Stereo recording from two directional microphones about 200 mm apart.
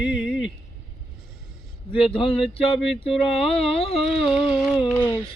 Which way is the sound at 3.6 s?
30° left (ahead or behind).